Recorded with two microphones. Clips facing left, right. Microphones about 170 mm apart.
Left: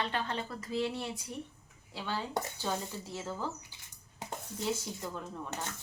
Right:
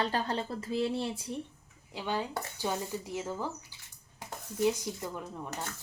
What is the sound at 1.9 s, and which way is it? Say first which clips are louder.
Speech: right 2 dB; 15° right (ahead or behind).